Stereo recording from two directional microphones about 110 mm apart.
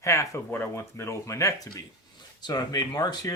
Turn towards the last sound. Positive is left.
turn(degrees=35)  # may be behind; listen again after turning